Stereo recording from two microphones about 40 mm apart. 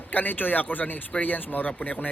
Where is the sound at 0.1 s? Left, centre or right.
Left.